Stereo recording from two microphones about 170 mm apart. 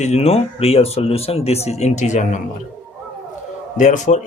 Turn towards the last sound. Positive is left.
turn(degrees=45)  # may be behind; listen again after turning